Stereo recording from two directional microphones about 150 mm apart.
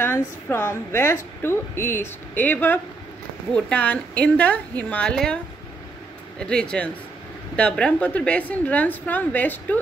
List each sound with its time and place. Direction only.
0.0 s a woman's voice: 15° left (ahead or behind)
6.4 s a woman's voice: 5° left (ahead or behind)